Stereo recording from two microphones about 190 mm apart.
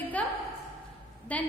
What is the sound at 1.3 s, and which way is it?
Speech, 5° left (ahead or behind).